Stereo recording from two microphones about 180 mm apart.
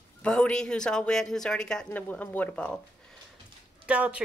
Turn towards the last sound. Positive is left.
turn(degrees=-5)  # may be behind; listen again after turning